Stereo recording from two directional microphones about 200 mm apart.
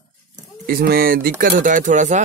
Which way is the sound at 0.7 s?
50° right (ahead or behind).